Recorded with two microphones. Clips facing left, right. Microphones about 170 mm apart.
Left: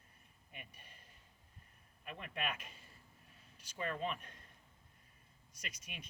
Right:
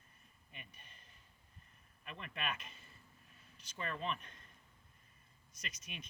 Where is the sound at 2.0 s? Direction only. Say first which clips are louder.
Left 1 dB; 10° left (ahead or behind).